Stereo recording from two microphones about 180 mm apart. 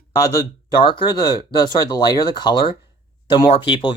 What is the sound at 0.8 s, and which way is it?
Speech, 25° left (ahead or behind).